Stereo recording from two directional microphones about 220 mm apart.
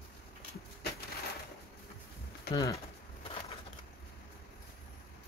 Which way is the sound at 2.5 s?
15° left (ahead or behind).